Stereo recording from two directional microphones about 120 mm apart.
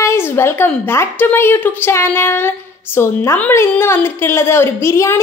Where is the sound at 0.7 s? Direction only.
15° left (ahead or behind).